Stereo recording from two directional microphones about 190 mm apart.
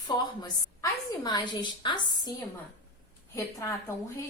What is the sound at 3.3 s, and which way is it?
Speech, 15° left (ahead or behind).